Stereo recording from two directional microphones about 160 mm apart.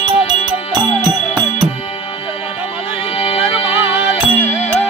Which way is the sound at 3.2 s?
35° left (ahead or behind).